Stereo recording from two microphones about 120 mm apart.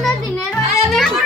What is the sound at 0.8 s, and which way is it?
Music, centre (ahead or behind).